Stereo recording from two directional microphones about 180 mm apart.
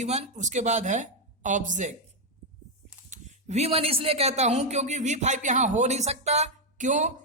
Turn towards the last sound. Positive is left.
turn(degrees=-45)  # may be behind; listen again after turning